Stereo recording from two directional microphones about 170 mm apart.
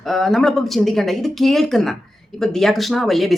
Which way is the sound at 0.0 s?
Centre (ahead or behind).